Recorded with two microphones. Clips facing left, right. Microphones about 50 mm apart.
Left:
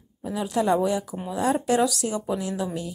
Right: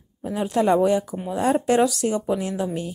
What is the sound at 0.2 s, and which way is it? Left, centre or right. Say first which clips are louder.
Speech: right 3 dB; right.